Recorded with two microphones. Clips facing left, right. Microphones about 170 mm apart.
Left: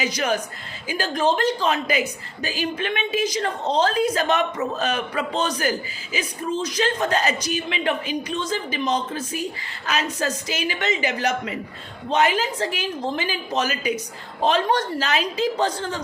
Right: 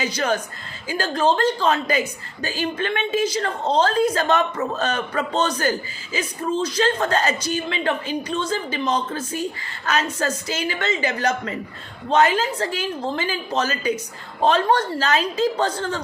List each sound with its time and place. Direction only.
0.0 s speech: 15° left (ahead or behind)